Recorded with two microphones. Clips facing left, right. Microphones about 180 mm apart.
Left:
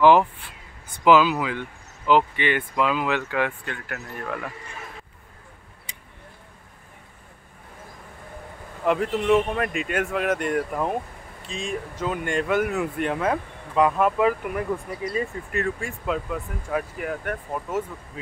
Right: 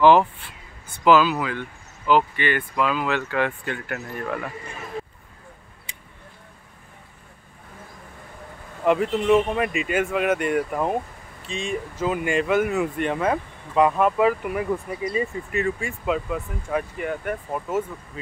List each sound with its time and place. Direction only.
0.0 s speech: 10° left (ahead or behind)
3.6 s speech: 5° right (ahead or behind)
8.8 s speech: centre (ahead or behind)